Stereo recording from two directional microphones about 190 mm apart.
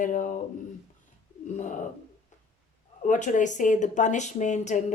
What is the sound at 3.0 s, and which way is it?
Speech, 40° left (ahead or behind).